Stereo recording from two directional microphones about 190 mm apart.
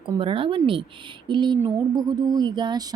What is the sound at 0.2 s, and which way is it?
Speech, 25° right (ahead or behind).